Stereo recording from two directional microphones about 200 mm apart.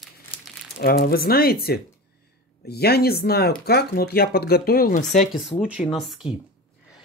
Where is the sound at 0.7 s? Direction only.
50° left (ahead or behind).